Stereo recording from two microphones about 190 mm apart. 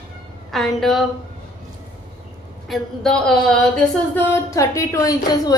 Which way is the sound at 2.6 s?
Centre (ahead or behind).